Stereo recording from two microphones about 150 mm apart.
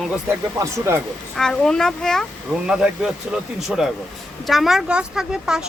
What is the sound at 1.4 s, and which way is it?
Speech, 5° left (ahead or behind).